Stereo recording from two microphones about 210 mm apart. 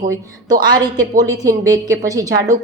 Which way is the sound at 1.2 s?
15° right (ahead or behind).